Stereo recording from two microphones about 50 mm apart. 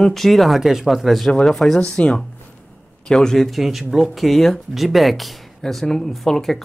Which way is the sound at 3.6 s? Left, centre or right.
Centre.